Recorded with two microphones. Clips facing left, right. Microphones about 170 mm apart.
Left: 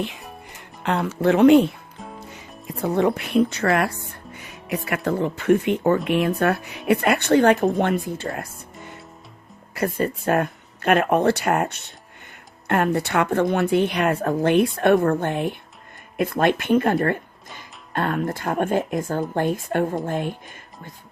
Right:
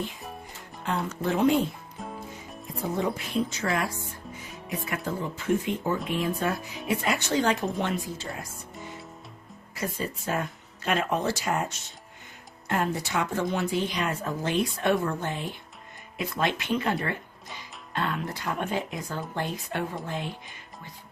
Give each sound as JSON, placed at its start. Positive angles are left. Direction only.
{"t": 0.5, "sound": "music", "side_deg": 70}
{"t": 1.2, "sound": "speech", "side_deg": 75}
{"t": 2.0, "sound": "music", "side_deg": 0}
{"t": 2.6, "sound": "speech", "side_deg": 70}
{"t": 9.7, "sound": "speech", "side_deg": 60}